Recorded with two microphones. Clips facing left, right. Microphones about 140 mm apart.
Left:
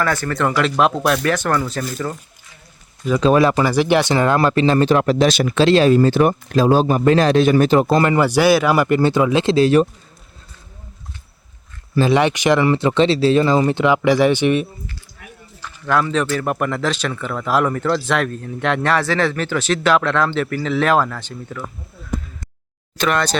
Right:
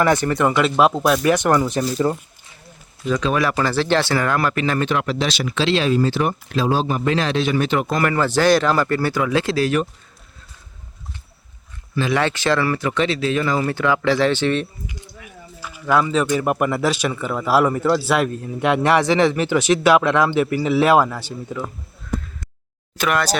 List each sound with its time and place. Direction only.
0.0 s speech: 20° right (ahead or behind)
0.8 s speech: 5° right (ahead or behind); by 2.1 s 20° right (ahead or behind)
3.2 s speech: 30° left (ahead or behind)
3.6 s speech: 15° left (ahead or behind); by 8.1 s 30° left (ahead or behind)
8.1 s speech: 15° left (ahead or behind)
12.1 s speech: 15° left (ahead or behind)
15.2 s a sound: 50° left (ahead or behind)
15.6 s speech: 5° right (ahead or behind)
23.0 s speech: 5° right (ahead or behind)